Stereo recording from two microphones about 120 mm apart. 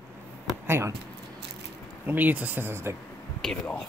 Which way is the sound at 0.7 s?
20° right (ahead or behind).